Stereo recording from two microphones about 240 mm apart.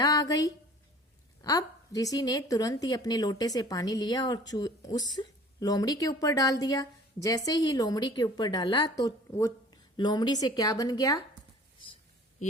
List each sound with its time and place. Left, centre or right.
0.0 s a woman's voice: centre